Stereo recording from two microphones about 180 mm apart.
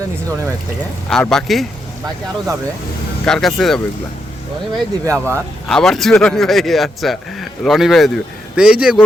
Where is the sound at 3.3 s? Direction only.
Centre (ahead or behind).